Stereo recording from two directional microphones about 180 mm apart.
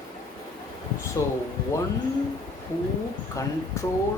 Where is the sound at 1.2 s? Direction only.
15° left (ahead or behind).